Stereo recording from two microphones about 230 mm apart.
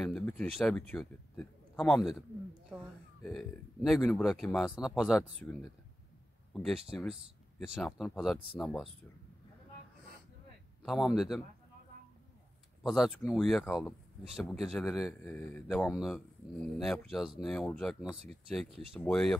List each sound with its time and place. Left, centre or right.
0.0 s a man's voice: centre
2.7 s gasp: centre
3.3 s speech: centre
10.8 s speech: centre
12.8 s speech: centre